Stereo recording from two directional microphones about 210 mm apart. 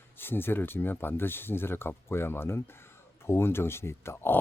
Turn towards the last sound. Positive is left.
turn(degrees=10)  # may be behind; listen again after turning